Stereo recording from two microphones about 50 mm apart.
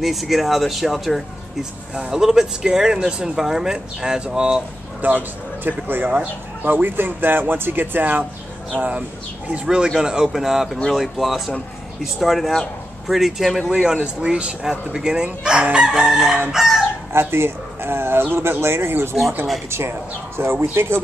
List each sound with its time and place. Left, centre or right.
0.0 s speech: centre
5.0 s a man's voice: right; by 13.7 s centre
13.9 s speech: right
16.5 s chicken: centre
17.1 s speech: right